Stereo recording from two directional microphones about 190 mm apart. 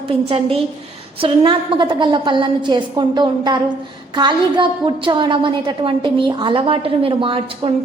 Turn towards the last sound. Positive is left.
turn(degrees=-30)  # may be behind; listen again after turning